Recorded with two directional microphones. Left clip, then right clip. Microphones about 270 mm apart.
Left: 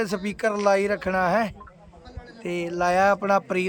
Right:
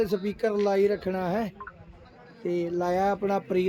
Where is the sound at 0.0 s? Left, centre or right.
Centre.